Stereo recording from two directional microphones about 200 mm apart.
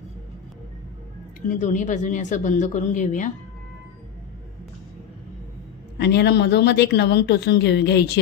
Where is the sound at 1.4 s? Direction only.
40° left (ahead or behind).